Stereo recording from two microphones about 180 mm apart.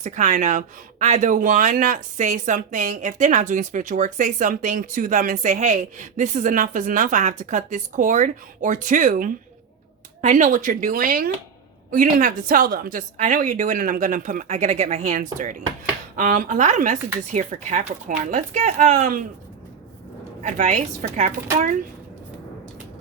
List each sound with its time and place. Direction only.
0.0 s speech: 40° right (ahead or behind)
20.4 s a woman's voice: 45° right (ahead or behind)